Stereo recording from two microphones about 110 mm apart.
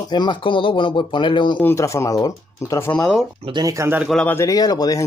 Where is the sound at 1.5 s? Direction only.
20° left (ahead or behind).